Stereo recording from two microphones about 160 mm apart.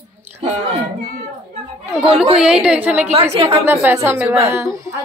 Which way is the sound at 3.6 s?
15° right (ahead or behind).